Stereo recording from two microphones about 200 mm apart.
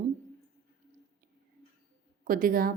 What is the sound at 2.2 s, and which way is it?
Speech, 45° right (ahead or behind).